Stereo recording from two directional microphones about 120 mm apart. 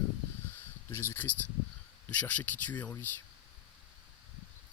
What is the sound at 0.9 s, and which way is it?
Speech, 20° left (ahead or behind).